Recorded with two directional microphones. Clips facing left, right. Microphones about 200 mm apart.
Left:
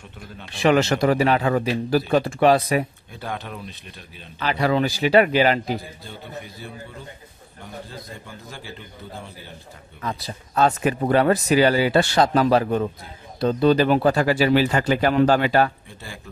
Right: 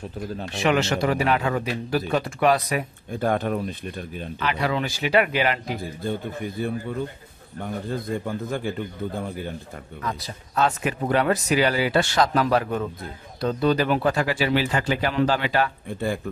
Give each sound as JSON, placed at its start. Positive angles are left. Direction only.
{"t": 0.6, "sound": "speech", "side_deg": 40}
{"t": 3.1, "sound": "speech", "side_deg": -50}
{"t": 4.4, "sound": "speech", "side_deg": 35}
{"t": 6.0, "sound": "a man's voice", "side_deg": -50}
{"t": 10.0, "sound": "speech", "side_deg": 35}